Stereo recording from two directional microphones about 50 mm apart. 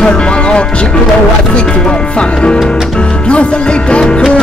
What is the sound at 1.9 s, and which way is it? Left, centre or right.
Music, left.